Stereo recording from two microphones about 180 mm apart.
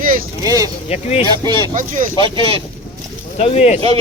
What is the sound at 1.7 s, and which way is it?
Speech, 45° right (ahead or behind).